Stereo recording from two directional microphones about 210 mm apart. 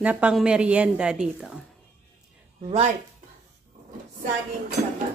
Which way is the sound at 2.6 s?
30° right (ahead or behind).